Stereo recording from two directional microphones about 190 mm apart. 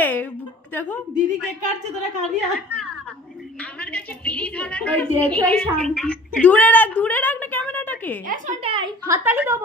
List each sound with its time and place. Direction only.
0.0 s a sound: 10° left (ahead or behind)
0.7 s a woman's voice: 10° left (ahead or behind)
1.1 s a woman's voice: 40° right (ahead or behind)
2.2 s a woman's voice: centre (ahead or behind)
8.6 s a woman's voice: 25° right (ahead or behind)
9.1 s a woman's voice: 10° right (ahead or behind)